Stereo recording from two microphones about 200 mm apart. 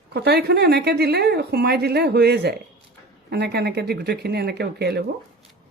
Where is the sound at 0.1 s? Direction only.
55° right (ahead or behind).